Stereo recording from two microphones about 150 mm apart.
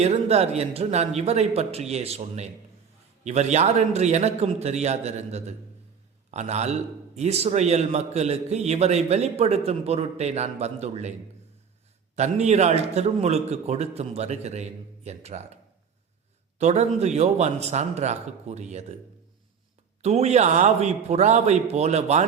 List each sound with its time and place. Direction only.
0.0 s a man's voice: 45° right (ahead or behind)
12.1 s a man's voice: 50° right (ahead or behind)
16.6 s a man's voice: 50° right (ahead or behind)
20.0 s a man's voice: 45° right (ahead or behind)